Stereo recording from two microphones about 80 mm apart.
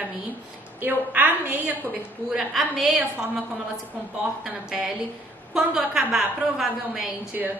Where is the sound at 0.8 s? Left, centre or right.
Right.